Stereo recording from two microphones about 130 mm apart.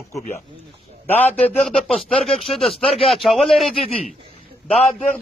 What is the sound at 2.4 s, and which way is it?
Speech, 45° left (ahead or behind).